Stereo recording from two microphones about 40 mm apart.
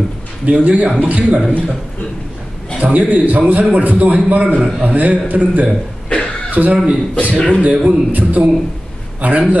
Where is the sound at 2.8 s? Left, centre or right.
Right.